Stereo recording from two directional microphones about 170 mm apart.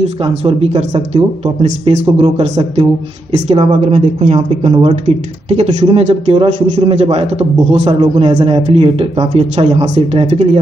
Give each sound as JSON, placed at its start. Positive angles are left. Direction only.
{"t": 0.0, "sound": "a man's voice", "side_deg": -35}